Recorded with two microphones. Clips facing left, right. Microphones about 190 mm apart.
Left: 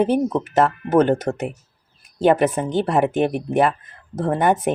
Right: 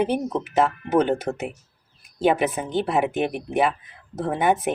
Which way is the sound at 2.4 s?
50° left (ahead or behind).